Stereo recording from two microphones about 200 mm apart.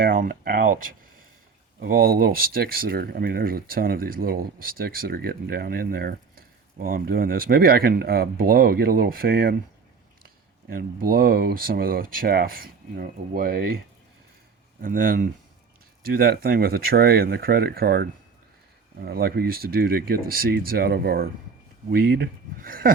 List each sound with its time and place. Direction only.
0.0 s speech: 45° right (ahead or behind)
1.8 s speech: 50° right (ahead or behind)
14.8 s speech: 45° right (ahead or behind)